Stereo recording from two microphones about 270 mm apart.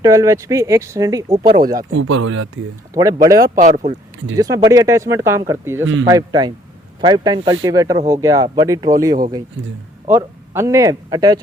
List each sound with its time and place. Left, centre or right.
0.0 s speech: centre
1.9 s speech: right
2.9 s speech: centre
3.6 s speech: right
4.4 s speech: centre
5.8 s speech: right
6.1 s speech: centre